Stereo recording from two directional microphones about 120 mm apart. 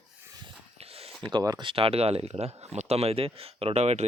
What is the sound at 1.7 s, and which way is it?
Speech, 50° right (ahead or behind).